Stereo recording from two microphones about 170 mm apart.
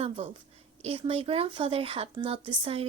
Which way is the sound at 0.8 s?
35° right (ahead or behind).